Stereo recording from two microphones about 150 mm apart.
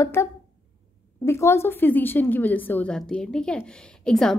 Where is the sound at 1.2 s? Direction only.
20° left (ahead or behind).